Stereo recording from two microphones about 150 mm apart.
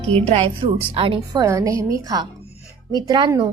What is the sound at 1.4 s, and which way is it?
A woman's voice, 20° right (ahead or behind).